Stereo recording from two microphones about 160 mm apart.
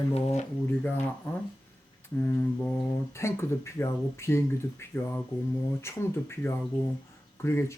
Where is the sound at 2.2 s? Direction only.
15° left (ahead or behind).